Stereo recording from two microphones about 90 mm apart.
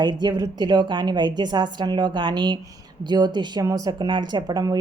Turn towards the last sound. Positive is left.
turn(degrees=-50)  # may be behind; listen again after turning